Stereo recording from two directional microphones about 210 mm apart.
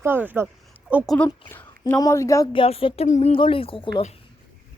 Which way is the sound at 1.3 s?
10° left (ahead or behind).